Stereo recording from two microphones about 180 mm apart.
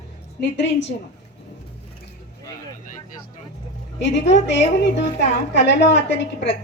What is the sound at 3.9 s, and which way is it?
Speech, 75° left (ahead or behind).